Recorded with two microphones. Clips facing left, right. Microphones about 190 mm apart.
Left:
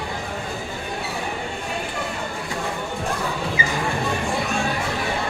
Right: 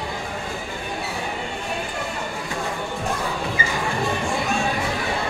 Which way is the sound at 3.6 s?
50° right (ahead or behind).